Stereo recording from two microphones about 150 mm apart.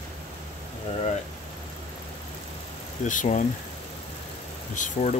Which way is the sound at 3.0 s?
55° left (ahead or behind).